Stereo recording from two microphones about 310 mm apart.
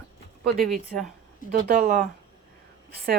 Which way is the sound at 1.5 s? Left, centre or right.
Right.